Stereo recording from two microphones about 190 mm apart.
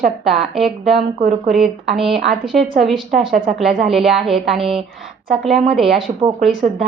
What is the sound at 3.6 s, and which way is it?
Speech, centre (ahead or behind).